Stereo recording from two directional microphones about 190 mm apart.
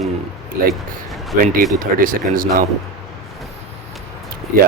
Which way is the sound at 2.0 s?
45° right (ahead or behind).